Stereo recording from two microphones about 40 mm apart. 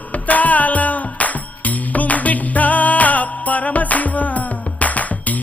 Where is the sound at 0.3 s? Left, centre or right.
Left.